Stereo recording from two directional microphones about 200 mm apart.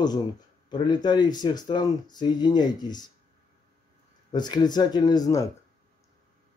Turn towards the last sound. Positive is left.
turn(degrees=15)  # may be behind; listen again after turning